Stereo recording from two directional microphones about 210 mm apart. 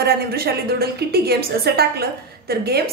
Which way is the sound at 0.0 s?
50° right (ahead or behind).